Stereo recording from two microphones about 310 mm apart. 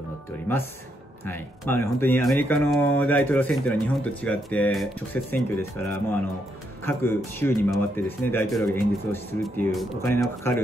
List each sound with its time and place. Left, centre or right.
1.2 s speech: centre